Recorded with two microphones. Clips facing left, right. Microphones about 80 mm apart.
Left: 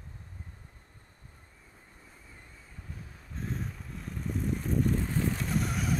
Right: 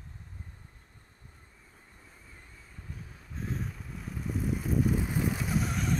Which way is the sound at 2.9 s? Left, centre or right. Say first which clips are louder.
Even; centre.